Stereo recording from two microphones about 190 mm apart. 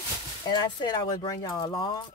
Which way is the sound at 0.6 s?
25° left (ahead or behind).